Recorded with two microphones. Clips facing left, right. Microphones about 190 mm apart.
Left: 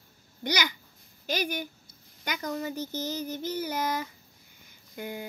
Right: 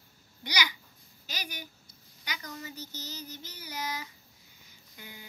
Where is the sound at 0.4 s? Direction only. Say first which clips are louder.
Left 5 dB; 50° left (ahead or behind).